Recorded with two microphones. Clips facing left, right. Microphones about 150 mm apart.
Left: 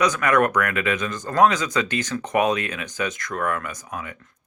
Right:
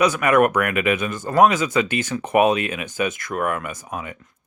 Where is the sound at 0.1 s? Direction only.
15° right (ahead or behind).